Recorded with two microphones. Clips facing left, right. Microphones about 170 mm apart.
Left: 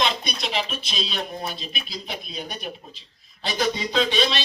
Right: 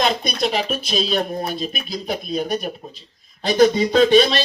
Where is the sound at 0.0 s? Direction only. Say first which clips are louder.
Right 6 dB; 45° right (ahead or behind).